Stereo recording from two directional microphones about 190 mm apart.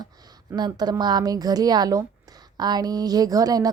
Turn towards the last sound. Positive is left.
turn(degrees=-20)  # may be behind; listen again after turning